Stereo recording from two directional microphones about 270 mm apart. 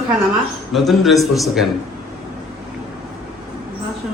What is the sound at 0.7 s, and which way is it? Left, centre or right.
Speech, centre.